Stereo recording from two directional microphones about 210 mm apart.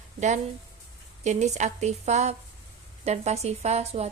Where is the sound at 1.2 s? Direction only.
35° right (ahead or behind).